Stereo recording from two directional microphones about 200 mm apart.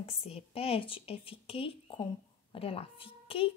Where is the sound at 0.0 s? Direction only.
30° left (ahead or behind).